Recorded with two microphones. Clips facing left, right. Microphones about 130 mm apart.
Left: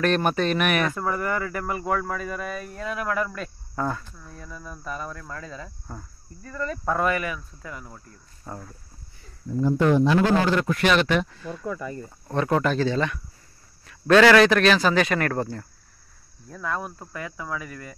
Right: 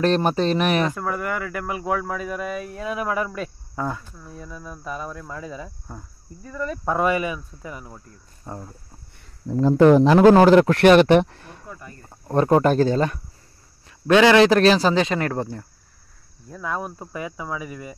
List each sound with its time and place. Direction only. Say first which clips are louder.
0.0 s speech: right 3 dB; 30° right (ahead or behind)
0.9 s speech: even; centre (ahead or behind); by 8.7 s 20° right (ahead or behind)
9.5 s speech: right 6 dB; 85° right
10.4 s a man's voice: right 9 dB; 80° right
11.1 s speech: right 7 dB; 55° right (ahead or behind)
12.3 s speech: right 6 dB; 40° right (ahead or behind)
14.0 s speech: right 1 dB; 20° right (ahead or behind)
16.4 s speech: right 2 dB; 5° right (ahead or behind)